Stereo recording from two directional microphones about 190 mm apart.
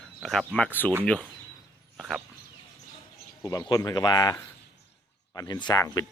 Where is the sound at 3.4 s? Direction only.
20° left (ahead or behind).